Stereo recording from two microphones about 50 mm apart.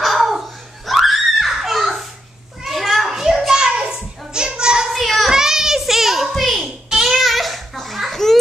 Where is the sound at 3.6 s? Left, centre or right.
Centre.